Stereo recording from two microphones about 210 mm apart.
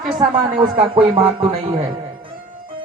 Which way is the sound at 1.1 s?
25° right (ahead or behind).